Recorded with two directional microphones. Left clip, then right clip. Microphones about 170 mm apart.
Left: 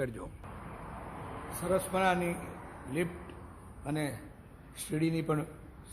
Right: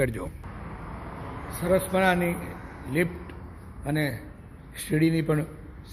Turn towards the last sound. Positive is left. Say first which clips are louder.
# right 8 dB
turn(degrees=0)  # may be behind; listen again after turning